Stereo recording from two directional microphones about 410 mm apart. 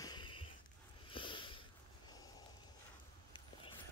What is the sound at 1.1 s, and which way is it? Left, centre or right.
Sniff, centre.